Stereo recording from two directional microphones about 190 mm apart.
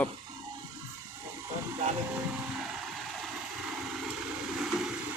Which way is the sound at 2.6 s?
Centre (ahead or behind).